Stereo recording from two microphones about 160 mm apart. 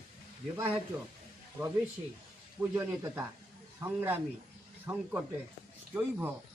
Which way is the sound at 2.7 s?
15° right (ahead or behind).